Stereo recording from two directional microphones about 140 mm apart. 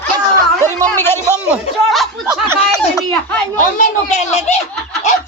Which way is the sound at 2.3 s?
20° right (ahead or behind).